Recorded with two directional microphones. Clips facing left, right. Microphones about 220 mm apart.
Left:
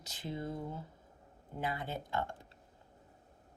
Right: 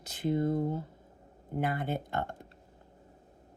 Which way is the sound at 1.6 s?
55° right (ahead or behind).